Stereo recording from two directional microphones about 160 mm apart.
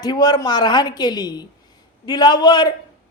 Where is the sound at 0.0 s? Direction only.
25° left (ahead or behind).